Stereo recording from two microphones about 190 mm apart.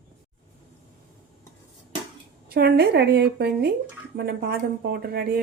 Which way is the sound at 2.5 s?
55° right (ahead or behind).